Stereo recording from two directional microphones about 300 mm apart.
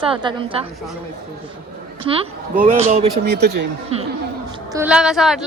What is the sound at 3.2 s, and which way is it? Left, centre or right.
Speech, right.